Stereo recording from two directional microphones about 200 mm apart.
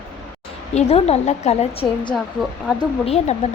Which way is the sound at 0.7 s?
35° left (ahead or behind).